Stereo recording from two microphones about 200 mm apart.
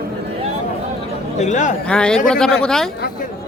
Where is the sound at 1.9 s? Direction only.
5° left (ahead or behind).